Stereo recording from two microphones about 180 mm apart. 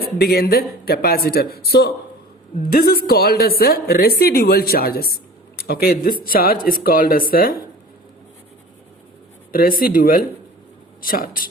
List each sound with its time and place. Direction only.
0.0 s a woman's voice: 60° left (ahead or behind)
9.5 s speech: 55° left (ahead or behind)